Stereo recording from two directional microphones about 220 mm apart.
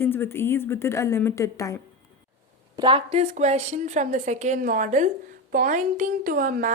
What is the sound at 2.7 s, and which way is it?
A woman's voice, 20° right (ahead or behind).